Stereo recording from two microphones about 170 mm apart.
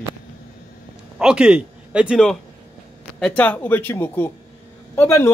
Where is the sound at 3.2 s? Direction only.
10° left (ahead or behind).